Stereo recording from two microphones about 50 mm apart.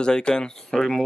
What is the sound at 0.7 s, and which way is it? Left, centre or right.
Mechanisms, centre.